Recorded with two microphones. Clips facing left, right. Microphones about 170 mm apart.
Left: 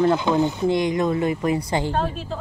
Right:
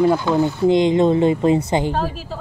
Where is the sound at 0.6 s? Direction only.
20° right (ahead or behind).